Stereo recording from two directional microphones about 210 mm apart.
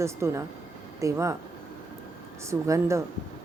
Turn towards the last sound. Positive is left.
turn(degrees=-15)  # may be behind; listen again after turning